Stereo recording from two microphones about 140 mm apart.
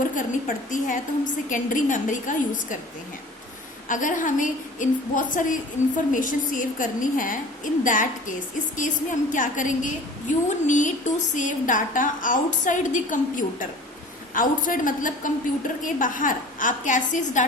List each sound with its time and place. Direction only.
0.0 s a woman's voice: 70° left (ahead or behind)
3.8 s a woman's voice: 65° left (ahead or behind)